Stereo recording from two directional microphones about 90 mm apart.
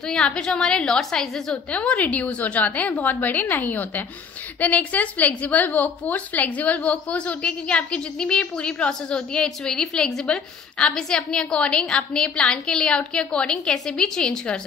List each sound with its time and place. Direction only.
0.0 s a woman's voice: 10° left (ahead or behind)